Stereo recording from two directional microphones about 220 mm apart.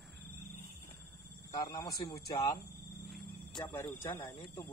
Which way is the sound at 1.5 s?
15° left (ahead or behind).